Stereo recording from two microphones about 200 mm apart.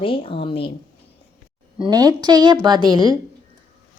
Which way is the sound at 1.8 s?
20° right (ahead or behind).